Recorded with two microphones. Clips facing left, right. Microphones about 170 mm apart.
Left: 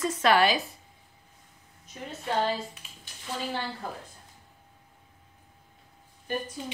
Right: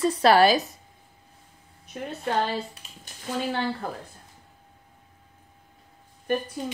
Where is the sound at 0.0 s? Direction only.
35° right (ahead or behind).